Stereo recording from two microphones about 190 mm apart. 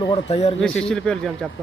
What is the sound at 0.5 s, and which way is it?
Speech, 5° left (ahead or behind).